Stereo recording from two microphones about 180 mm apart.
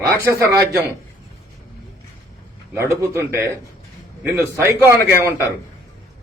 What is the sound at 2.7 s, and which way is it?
A man's voice, 15° right (ahead or behind).